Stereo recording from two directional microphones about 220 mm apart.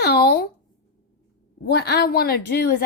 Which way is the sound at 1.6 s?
45° left (ahead or behind).